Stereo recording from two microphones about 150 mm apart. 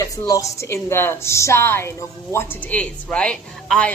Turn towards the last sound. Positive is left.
turn(degrees=5)  # may be behind; listen again after turning